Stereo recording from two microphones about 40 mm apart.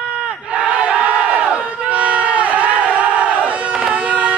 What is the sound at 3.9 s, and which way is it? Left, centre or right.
Music, right.